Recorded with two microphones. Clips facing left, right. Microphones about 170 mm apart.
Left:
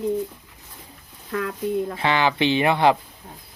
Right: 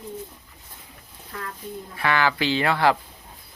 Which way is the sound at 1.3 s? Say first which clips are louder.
Left 11 dB; 80° left.